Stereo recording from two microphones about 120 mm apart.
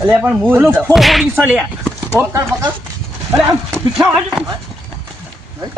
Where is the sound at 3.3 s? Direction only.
Centre (ahead or behind).